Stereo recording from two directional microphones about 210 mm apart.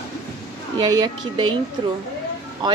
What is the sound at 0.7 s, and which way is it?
Speech, 20° right (ahead or behind).